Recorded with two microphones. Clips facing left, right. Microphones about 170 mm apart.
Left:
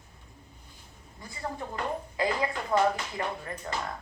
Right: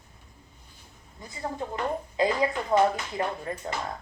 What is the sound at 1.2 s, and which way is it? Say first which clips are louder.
Speech: right 3 dB; 20° right (ahead or behind).